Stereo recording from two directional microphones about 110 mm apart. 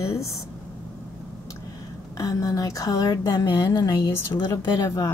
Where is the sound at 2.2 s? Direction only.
30° left (ahead or behind).